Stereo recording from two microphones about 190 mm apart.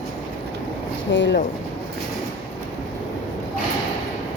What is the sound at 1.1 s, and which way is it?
Speech, 75° left (ahead or behind).